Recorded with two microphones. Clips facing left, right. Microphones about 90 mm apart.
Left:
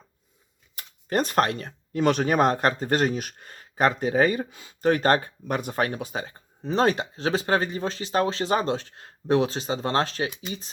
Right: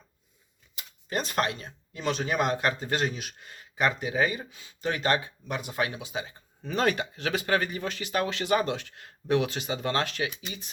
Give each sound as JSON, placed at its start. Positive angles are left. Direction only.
{"t": 0.8, "sound": "speech", "side_deg": 45}